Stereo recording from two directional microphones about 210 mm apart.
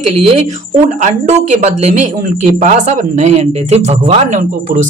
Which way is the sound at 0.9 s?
35° right (ahead or behind).